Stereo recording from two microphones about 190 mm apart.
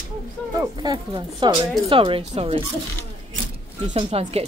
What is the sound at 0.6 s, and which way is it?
Speech, 20° right (ahead or behind).